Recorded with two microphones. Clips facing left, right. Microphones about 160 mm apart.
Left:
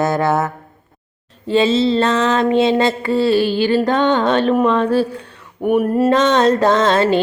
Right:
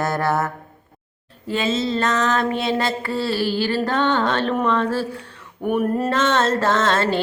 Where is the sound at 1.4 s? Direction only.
30° left (ahead or behind); by 4.7 s 10° left (ahead or behind).